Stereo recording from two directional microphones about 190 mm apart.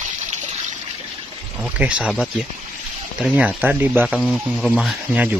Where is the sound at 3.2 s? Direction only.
5° right (ahead or behind).